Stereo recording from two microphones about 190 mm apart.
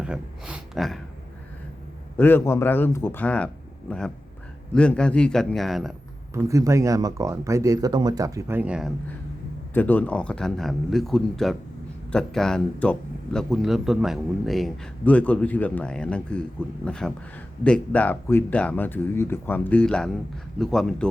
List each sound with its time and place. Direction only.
0.0 s speech: 5° right (ahead or behind)
2.1 s speech: 10° left (ahead or behind)
6.3 s speech: 15° right (ahead or behind)
9.7 s speech: 10° left (ahead or behind)